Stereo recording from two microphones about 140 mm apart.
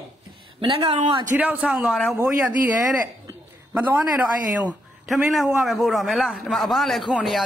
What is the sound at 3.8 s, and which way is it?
Speech, 10° right (ahead or behind).